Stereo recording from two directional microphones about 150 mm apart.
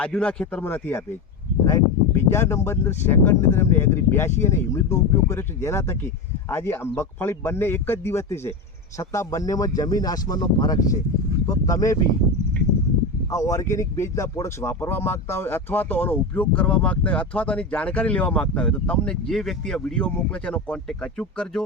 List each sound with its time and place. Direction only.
0.0 s speech: 5° left (ahead or behind)
13.3 s speech: 20° left (ahead or behind)